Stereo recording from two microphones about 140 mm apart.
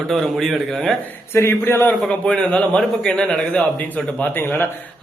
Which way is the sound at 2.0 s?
5° left (ahead or behind).